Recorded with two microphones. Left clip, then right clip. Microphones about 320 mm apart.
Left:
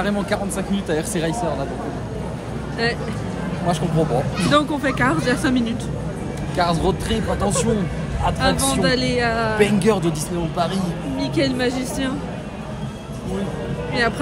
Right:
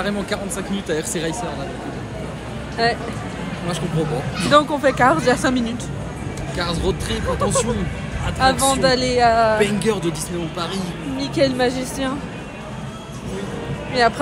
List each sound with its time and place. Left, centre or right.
0.8 s speech: centre
2.8 s a woman's voice: centre
4.5 s speech: centre
6.5 s speech: centre
8.4 s speech: centre
9.6 s speech: left
11.1 s a woman's voice: centre
14.0 s speech: centre